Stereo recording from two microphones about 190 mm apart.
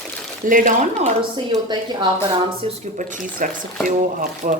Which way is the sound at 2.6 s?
40° right (ahead or behind).